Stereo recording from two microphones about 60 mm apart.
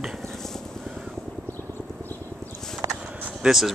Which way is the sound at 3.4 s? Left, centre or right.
Centre.